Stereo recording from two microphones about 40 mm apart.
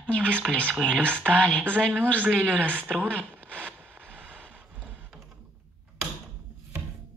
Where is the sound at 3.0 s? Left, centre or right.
Right.